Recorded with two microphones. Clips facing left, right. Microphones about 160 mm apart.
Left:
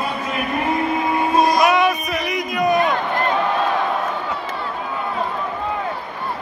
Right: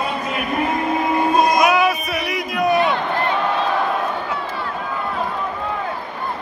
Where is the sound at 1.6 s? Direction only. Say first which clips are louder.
Even; centre (ahead or behind).